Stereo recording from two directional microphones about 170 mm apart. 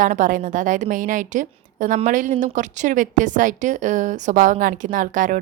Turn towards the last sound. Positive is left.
turn(degrees=-50)  # may be behind; listen again after turning